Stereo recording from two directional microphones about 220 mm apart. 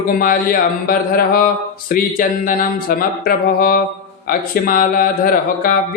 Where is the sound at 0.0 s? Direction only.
40° left (ahead or behind).